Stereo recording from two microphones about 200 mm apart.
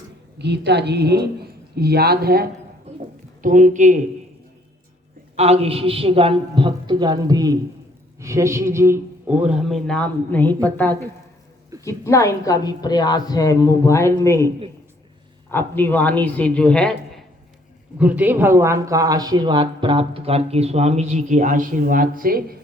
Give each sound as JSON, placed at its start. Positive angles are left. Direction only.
{"t": 0.3, "sound": "speech", "side_deg": -55}
{"t": 2.9, "sound": "a sound", "side_deg": -30}
{"t": 3.4, "sound": "speech", "side_deg": -40}
{"t": 5.4, "sound": "a man's voice", "side_deg": -30}
{"t": 17.9, "sound": "speech", "side_deg": -5}